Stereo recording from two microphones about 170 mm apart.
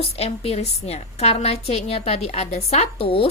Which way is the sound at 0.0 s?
35° left (ahead or behind).